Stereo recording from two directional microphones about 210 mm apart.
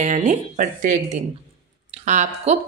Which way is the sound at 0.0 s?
35° right (ahead or behind).